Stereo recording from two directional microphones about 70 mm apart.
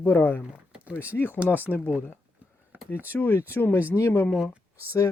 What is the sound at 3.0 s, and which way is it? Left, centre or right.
Speech, left.